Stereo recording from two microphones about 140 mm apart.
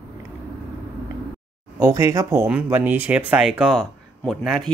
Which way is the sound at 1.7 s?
20° right (ahead or behind).